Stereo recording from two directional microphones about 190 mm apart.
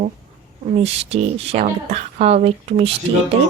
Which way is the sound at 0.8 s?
35° right (ahead or behind).